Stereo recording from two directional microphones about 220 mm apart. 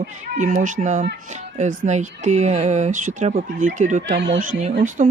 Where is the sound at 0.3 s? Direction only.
35° right (ahead or behind).